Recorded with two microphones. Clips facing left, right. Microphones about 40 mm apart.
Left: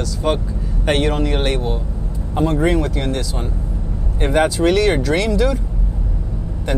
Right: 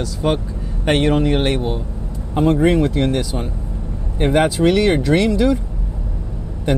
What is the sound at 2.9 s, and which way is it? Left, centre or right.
Speech, right.